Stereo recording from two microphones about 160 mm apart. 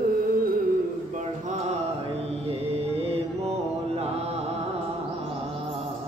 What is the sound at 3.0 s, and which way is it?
Mantra, 40° right (ahead or behind).